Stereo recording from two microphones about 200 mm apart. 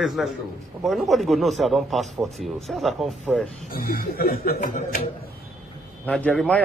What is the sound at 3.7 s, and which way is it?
Speech, 45° left (ahead or behind).